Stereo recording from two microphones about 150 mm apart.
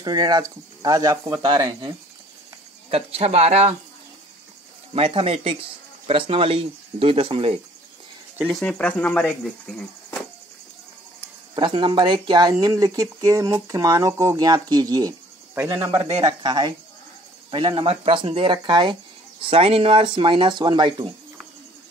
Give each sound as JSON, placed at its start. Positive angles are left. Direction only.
{"t": 0.0, "sound": "speech", "side_deg": -25}
{"t": 2.9, "sound": "speech", "side_deg": -40}
{"t": 4.9, "sound": "speech", "side_deg": -40}
{"t": 8.5, "sound": "speech", "side_deg": 0}
{"t": 11.5, "sound": "speech", "side_deg": -35}